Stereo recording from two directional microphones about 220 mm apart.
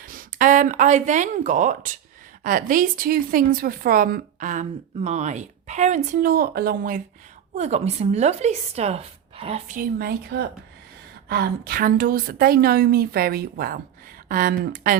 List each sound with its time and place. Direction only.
0.0 s a woman's voice: 40° right (ahead or behind)
7.5 s a woman's voice: 30° right (ahead or behind)